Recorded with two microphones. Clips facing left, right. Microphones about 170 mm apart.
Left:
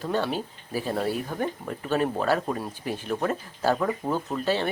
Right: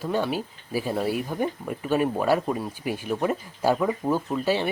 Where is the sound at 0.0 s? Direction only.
10° right (ahead or behind).